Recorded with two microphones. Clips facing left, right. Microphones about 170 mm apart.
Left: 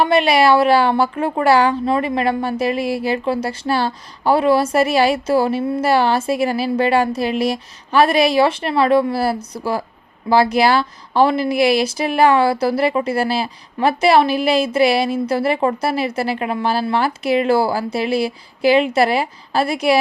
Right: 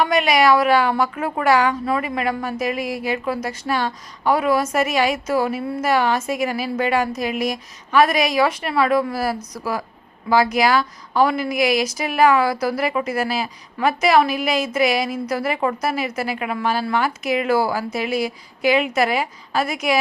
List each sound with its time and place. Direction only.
0.0 s speech: 30° left (ahead or behind)